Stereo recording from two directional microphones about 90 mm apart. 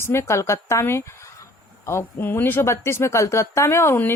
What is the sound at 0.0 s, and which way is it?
Speech, 30° left (ahead or behind).